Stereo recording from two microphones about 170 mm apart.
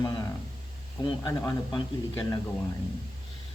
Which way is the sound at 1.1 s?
25° left (ahead or behind).